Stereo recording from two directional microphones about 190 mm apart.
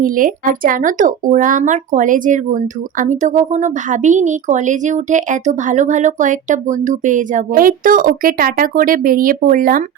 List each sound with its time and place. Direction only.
0.0 s speech: 45° right (ahead or behind)